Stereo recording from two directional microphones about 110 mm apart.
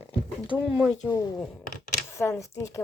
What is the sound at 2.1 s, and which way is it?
Speech, 25° left (ahead or behind).